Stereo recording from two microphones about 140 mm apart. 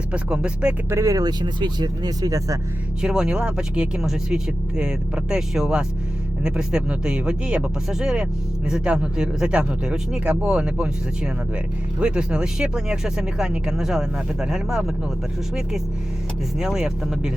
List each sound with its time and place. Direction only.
0.1 s speech: 5° right (ahead or behind)
0.9 s speech: 25° right (ahead or behind)
3.0 s speech: 5° right (ahead or behind)
11.9 s speech: 5° right (ahead or behind)
16.6 s speech: 5° right (ahead or behind)